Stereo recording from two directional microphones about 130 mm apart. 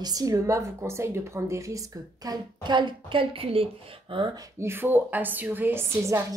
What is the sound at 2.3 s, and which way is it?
Speech, 35° right (ahead or behind).